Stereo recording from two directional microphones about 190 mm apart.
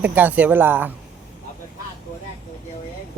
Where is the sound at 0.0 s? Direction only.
10° right (ahead or behind).